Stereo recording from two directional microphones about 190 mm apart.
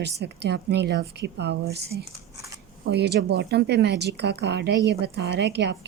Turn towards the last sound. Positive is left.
turn(degrees=-60)  # may be behind; listen again after turning